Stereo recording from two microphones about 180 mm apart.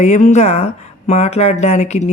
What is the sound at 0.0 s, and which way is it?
Speech, 40° left (ahead or behind).